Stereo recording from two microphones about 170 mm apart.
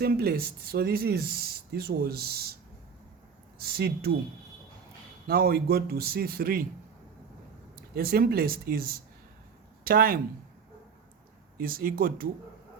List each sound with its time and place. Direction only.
0.0 s speech: 65° right (ahead or behind)
3.6 s speech: 65° right (ahead or behind)
5.3 s speech: 65° right (ahead or behind)
7.9 s speech: 60° right (ahead or behind)
11.5 s speech: 55° right (ahead or behind)